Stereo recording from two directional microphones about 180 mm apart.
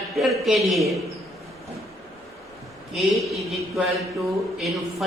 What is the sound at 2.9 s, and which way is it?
Speech, centre (ahead or behind).